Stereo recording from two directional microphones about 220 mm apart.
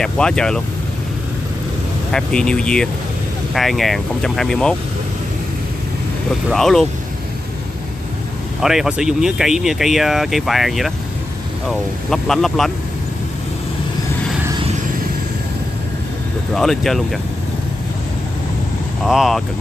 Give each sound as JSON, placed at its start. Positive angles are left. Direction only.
{"t": 0.0, "sound": "speech", "side_deg": 5}
{"t": 2.1, "sound": "speech", "side_deg": 5}
{"t": 6.5, "sound": "speech", "side_deg": 0}
{"t": 8.5, "sound": "speech", "side_deg": 0}
{"t": 12.1, "sound": "speech", "side_deg": 0}
{"t": 16.5, "sound": "speech", "side_deg": 0}
{"t": 19.0, "sound": "speech", "side_deg": 0}